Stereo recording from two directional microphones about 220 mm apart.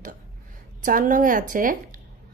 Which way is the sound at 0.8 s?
35° right (ahead or behind).